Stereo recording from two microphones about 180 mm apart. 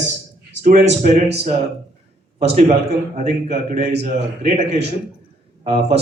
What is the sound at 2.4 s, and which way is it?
A man's voice, 40° right (ahead or behind).